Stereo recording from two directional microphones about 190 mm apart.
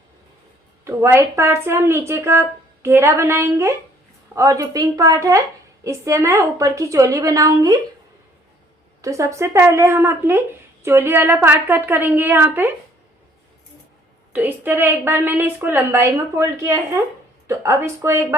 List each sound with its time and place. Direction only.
0.9 s a woman's voice: 15° right (ahead or behind)
9.0 s a woman's voice: 15° right (ahead or behind)
14.3 s a woman's voice: 10° right (ahead or behind)